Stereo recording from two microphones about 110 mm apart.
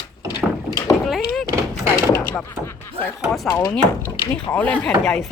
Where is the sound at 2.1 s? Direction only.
20° left (ahead or behind).